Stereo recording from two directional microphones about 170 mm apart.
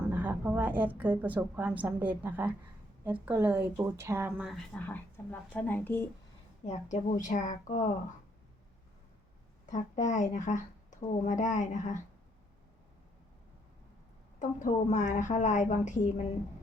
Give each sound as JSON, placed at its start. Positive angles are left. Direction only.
{"t": 0.1, "sound": "a woman's voice", "side_deg": -10}
{"t": 4.7, "sound": "speech", "side_deg": 10}
{"t": 6.7, "sound": "speech", "side_deg": 45}
{"t": 9.6, "sound": "speech", "side_deg": 45}
{"t": 14.3, "sound": "speech", "side_deg": 45}